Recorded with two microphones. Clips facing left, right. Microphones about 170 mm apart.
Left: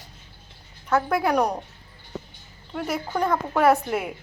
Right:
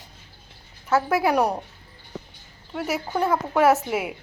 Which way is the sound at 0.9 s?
5° right (ahead or behind).